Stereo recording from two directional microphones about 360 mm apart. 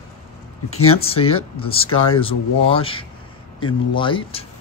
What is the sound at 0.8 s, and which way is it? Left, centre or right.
Speech, centre.